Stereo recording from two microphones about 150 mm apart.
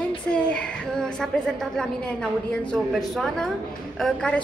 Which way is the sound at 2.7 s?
5° left (ahead or behind).